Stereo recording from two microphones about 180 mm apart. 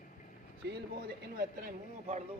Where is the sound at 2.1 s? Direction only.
35° right (ahead or behind).